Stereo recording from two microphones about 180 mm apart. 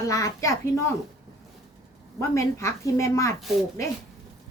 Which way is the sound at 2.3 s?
15° left (ahead or behind).